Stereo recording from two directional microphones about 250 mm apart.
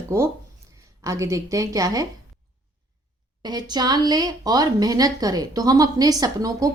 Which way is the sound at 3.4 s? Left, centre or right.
Centre.